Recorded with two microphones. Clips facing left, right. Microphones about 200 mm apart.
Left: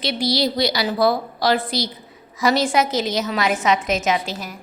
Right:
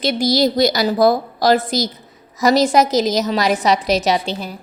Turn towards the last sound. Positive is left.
turn(degrees=-30)  # may be behind; listen again after turning